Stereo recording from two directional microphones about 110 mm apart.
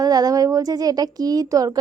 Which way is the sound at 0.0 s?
35° right (ahead or behind).